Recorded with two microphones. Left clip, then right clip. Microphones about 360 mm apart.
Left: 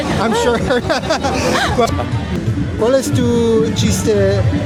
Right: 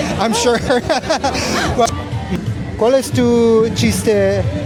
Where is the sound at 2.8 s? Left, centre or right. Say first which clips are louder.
Right 1 dB; right.